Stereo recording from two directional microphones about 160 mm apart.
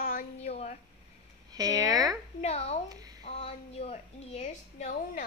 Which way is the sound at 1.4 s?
20° right (ahead or behind).